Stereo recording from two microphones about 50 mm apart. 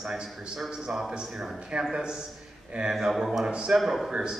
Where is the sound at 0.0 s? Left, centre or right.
Centre.